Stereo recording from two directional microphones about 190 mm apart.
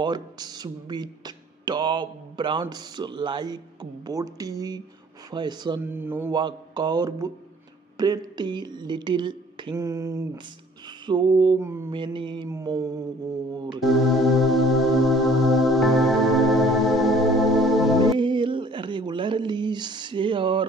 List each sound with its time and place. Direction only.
0.0 s speech: 20° right (ahead or behind)
5.8 s mantra: 10° right (ahead or behind)
6.3 s speech: 25° right (ahead or behind)
11.6 s mantra: 15° right (ahead or behind)
11.9 s speech: 25° right (ahead or behind)
12.5 s mantra: 15° right (ahead or behind)
13.7 s music: centre (ahead or behind)
18.2 s a sound: 25° right (ahead or behind)